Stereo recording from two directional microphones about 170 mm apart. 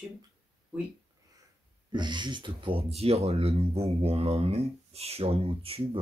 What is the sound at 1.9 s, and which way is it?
Speech, 25° right (ahead or behind).